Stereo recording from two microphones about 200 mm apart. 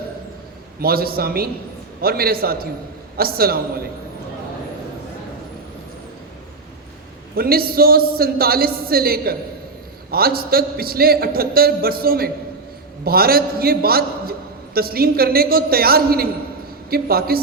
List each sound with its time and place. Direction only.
0.8 s a man's voice: 50° right (ahead or behind)
7.3 s a man's voice: 50° right (ahead or behind)